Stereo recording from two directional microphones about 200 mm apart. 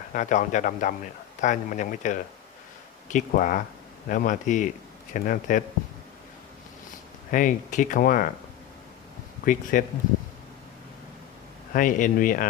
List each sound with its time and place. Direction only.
0.1 s speech: 40° left (ahead or behind)
7.3 s speech: 40° left (ahead or behind)
9.4 s speech: 45° left (ahead or behind)
11.7 s speech: 40° left (ahead or behind)